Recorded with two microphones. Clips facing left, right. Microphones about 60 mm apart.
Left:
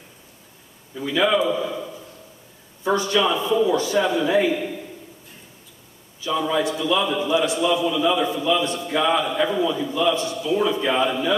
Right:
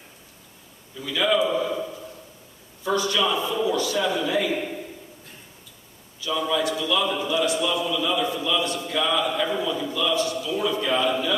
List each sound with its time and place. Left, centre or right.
0.9 s a man's voice: left
2.8 s a man's voice: left
6.2 s a man's voice: left